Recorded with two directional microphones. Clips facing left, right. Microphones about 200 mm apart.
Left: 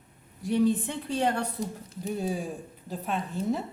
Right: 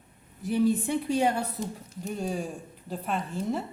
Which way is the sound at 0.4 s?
5° right (ahead or behind).